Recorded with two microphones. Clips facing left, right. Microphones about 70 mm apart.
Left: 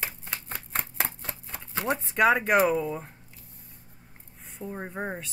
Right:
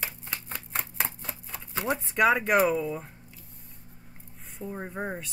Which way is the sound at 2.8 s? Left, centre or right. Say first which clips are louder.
Left 1 dB; centre.